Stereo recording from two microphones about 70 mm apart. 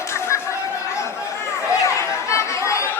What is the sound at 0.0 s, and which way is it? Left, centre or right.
Chatter, left.